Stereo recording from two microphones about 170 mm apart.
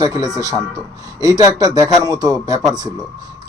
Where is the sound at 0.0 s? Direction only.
20° right (ahead or behind).